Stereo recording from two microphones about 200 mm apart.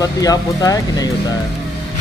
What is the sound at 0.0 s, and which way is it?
Speech, 20° left (ahead or behind).